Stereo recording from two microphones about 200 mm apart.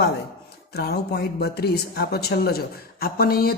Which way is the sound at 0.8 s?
55° left (ahead or behind).